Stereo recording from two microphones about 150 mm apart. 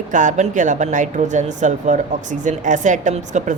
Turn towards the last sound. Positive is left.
turn(degrees=-55)  # may be behind; listen again after turning